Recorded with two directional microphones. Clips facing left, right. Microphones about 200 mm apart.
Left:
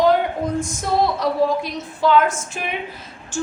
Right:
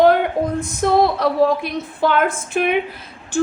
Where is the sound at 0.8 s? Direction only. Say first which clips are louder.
Right 7 dB; 60° right (ahead or behind).